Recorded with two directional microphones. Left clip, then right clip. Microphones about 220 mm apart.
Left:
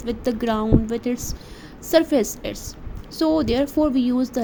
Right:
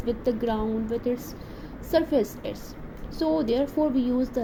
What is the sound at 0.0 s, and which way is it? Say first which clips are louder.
A woman's voice: left 2 dB; 45° left (ahead or behind).